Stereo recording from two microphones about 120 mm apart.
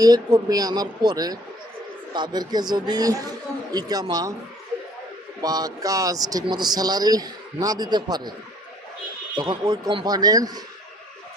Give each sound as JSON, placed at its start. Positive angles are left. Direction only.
{"t": 0.0, "sound": "speech", "side_deg": -30}
{"t": 5.4, "sound": "speech", "side_deg": -35}
{"t": 9.3, "sound": "speech", "side_deg": -35}